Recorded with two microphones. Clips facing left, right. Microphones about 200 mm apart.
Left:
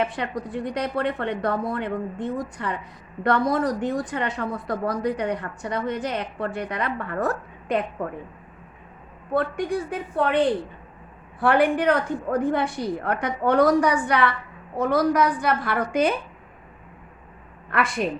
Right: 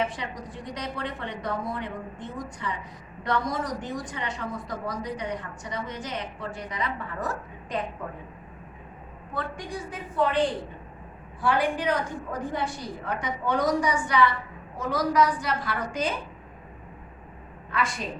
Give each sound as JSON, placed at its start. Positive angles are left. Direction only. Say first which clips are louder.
{"t": 0.0, "sound": "a woman's voice", "louder": "left 4 dB", "side_deg": 60}
{"t": 9.3, "sound": "a woman's voice", "louder": "left 10 dB", "side_deg": 60}
{"t": 17.7, "sound": "a woman's voice", "louder": "left 6 dB", "side_deg": 60}